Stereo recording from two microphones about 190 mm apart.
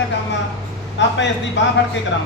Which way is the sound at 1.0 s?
70° left (ahead or behind).